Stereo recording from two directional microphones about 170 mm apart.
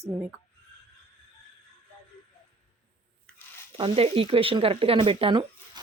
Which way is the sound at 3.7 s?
35° right (ahead or behind).